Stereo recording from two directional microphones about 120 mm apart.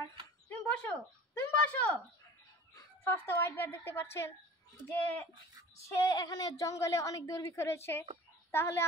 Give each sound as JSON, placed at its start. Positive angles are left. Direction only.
{"t": 0.5, "sound": "a sound", "side_deg": 15}
{"t": 3.0, "sound": "a woman's voice", "side_deg": 20}
{"t": 5.9, "sound": "female singing", "side_deg": 35}
{"t": 6.6, "sound": "a woman's voice", "side_deg": 25}